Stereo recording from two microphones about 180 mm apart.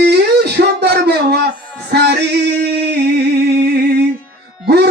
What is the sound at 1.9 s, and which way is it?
Male singing, 65° right (ahead or behind).